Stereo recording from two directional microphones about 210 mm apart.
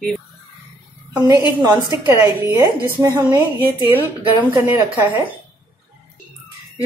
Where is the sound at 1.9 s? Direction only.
15° right (ahead or behind).